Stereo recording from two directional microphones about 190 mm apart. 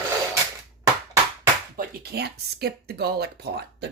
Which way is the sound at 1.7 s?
55° right (ahead or behind).